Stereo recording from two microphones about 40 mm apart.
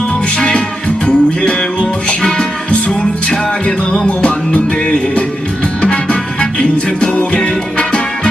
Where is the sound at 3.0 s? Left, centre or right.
Left.